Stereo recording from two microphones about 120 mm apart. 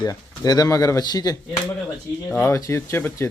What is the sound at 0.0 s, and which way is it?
Speech, 35° left (ahead or behind).